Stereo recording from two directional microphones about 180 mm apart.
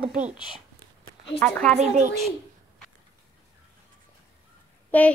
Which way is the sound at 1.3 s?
10° left (ahead or behind).